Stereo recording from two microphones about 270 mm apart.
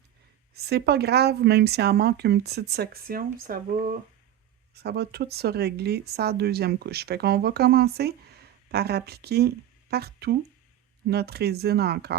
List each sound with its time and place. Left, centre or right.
0.5 s speech: right